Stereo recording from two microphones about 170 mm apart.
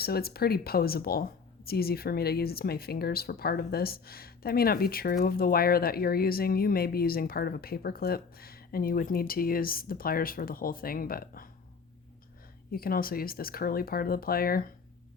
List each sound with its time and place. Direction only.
0.0 s speech: 65° left (ahead or behind)
12.7 s speech: 60° left (ahead or behind)